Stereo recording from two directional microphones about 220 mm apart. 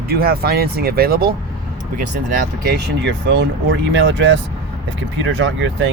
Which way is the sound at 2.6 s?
50° right (ahead or behind).